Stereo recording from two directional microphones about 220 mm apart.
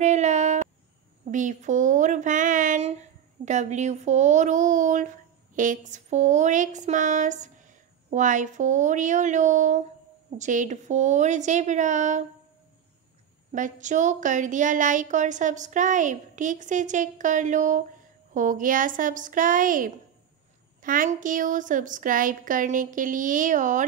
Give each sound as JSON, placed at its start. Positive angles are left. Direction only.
{"t": 0.0, "sound": "a sound", "side_deg": -30}
{"t": 1.2, "sound": "speech", "side_deg": -35}
{"t": 13.5, "sound": "speech", "side_deg": -35}